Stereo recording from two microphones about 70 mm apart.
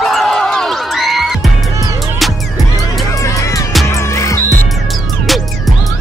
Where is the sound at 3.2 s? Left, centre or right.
Left.